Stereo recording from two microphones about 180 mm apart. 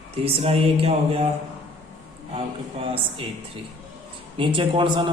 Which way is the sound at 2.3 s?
30° right (ahead or behind).